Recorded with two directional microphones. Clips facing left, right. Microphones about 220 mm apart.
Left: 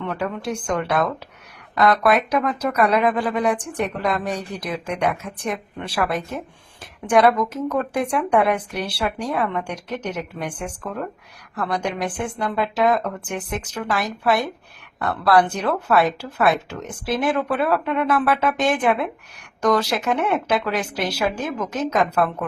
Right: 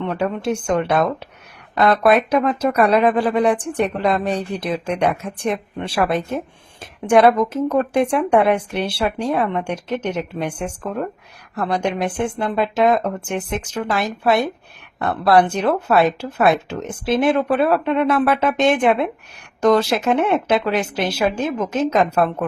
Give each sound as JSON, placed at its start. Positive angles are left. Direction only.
{"t": 0.0, "sound": "speech", "side_deg": -25}